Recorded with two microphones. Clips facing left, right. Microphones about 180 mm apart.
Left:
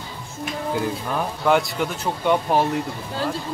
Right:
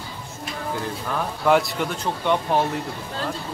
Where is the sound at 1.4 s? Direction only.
Centre (ahead or behind).